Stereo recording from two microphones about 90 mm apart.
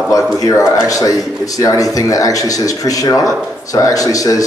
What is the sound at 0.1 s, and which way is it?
Speech, 40° left (ahead or behind).